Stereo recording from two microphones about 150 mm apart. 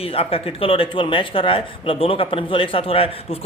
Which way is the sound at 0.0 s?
40° left (ahead or behind).